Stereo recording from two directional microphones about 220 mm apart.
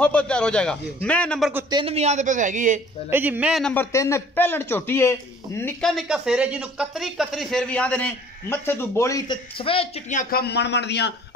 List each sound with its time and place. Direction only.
0.0 s a man's voice: 5° left (ahead or behind)
1.5 s speech: 10° right (ahead or behind)
1.8 s a man's voice: 25° right (ahead or behind)
3.1 s speech: 10° right (ahead or behind)
3.7 s speech: 10° left (ahead or behind); by 11.1 s 50° left (ahead or behind)